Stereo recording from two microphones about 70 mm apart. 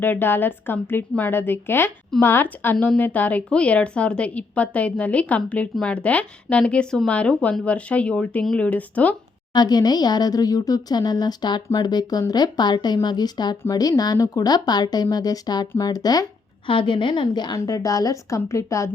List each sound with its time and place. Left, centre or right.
0.0 s a woman's voice: left
9.5 s speech: left
17.1 s a woman's voice: left
17.6 s a woman's voice: left